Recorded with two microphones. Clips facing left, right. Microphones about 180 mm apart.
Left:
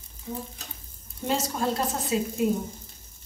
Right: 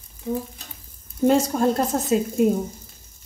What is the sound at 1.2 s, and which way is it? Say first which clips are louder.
A woman's voice: right 9 dB; 50° right (ahead or behind).